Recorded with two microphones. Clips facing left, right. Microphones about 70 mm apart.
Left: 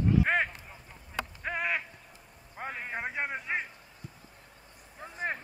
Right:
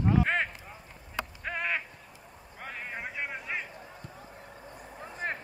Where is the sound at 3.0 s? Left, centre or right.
Left.